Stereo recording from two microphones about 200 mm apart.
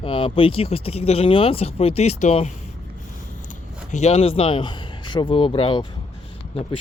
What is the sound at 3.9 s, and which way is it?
Speech, 35° left (ahead or behind).